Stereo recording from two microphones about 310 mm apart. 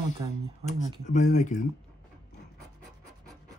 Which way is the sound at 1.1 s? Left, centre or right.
Left.